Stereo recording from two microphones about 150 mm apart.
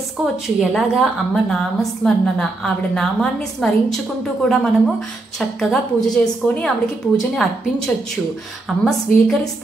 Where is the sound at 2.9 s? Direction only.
5° left (ahead or behind).